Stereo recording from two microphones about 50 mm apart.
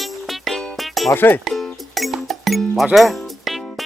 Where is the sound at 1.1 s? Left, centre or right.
Left.